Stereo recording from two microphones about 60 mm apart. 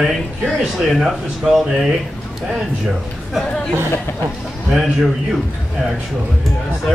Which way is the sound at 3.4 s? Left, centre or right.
Centre.